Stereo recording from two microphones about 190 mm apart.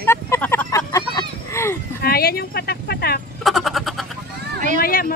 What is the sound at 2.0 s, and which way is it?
Speech, 55° left (ahead or behind).